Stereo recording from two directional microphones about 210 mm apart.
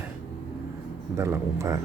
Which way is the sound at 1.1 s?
15° right (ahead or behind).